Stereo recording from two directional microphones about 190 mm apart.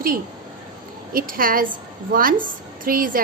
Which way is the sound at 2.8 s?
50° right (ahead or behind).